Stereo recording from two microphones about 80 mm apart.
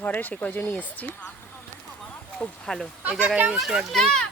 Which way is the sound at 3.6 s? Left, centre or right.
Centre.